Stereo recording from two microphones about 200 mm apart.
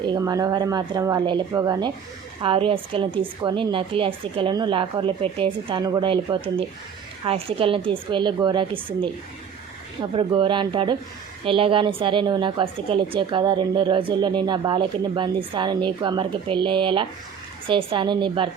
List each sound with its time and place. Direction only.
0.0 s a woman's voice: 20° right (ahead or behind)